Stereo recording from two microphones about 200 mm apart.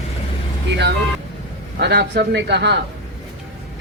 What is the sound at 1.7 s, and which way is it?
Speech, 55° right (ahead or behind).